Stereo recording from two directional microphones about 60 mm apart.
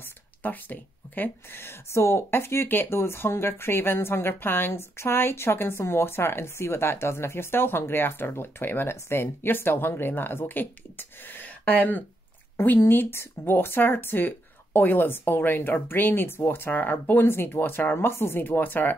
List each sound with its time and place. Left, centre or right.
0.4 s speech: left
17.9 s speech: left